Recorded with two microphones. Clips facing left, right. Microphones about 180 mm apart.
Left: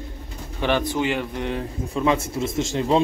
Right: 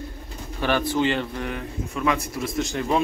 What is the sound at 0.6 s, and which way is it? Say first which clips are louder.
Speech: even; 20° left (ahead or behind).